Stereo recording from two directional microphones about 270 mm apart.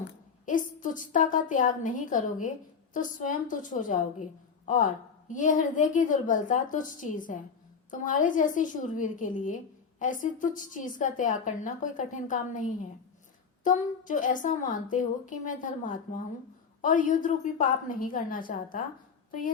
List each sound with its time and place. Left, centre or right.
0.0 s a woman's voice: left
13.7 s a woman's voice: left